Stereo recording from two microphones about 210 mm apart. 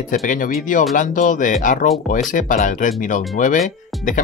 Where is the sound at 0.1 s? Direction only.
40° left (ahead or behind).